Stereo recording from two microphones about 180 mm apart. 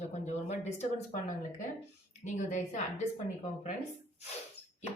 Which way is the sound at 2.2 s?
40° left (ahead or behind).